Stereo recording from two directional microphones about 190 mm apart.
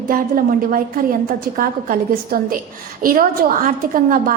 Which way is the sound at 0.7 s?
50° right (ahead or behind).